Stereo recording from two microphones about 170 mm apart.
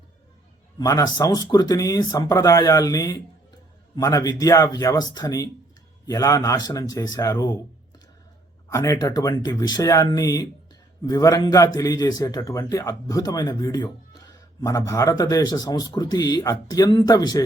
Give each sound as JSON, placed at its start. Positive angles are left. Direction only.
{"t": 0.8, "sound": "a man's voice", "side_deg": 20}
{"t": 8.7, "sound": "a man's voice", "side_deg": 20}